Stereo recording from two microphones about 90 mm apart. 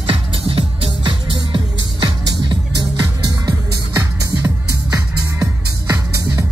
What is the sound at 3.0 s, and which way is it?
Music, 45° right (ahead or behind).